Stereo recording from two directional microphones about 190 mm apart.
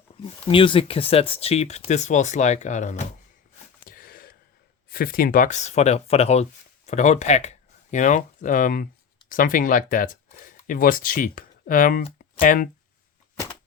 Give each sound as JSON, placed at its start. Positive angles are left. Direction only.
{"t": 0.3, "sound": "speech", "side_deg": 30}
{"t": 3.8, "sound": "a sound", "side_deg": 50}
{"t": 4.9, "sound": "speech", "side_deg": 50}